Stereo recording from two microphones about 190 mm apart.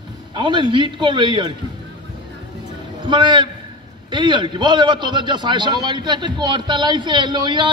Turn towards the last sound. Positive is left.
turn(degrees=-25)  # may be behind; listen again after turning